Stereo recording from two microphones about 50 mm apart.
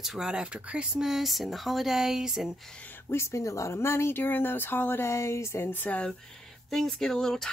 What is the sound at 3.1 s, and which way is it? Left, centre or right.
Speech, left.